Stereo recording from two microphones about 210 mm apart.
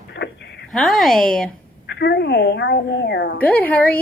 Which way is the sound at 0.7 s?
Centre (ahead or behind).